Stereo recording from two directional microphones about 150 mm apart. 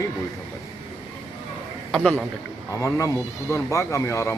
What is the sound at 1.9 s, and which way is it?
Speech, 5° left (ahead or behind).